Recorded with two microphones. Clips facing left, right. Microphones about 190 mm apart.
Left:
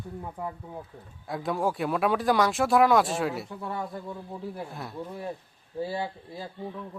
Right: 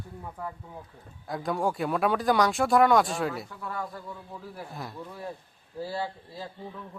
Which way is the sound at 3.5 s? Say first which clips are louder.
Left 2 dB; 25° left (ahead or behind).